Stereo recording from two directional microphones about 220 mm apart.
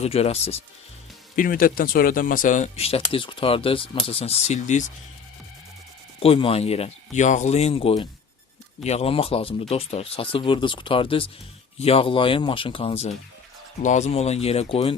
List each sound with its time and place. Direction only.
0.0 s speech: 30° left (ahead or behind)
1.4 s speech: 40° left (ahead or behind)
6.1 s speech: 25° left (ahead or behind)